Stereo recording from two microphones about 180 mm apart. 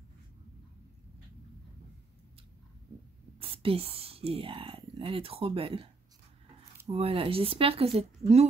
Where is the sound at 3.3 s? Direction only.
30° right (ahead or behind).